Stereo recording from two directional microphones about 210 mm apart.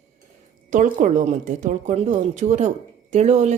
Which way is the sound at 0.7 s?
35° right (ahead or behind).